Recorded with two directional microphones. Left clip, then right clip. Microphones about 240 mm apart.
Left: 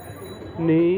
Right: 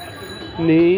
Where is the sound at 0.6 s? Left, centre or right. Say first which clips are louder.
Right 5 dB; right.